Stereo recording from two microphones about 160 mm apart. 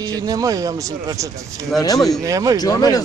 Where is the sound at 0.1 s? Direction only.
20° right (ahead or behind).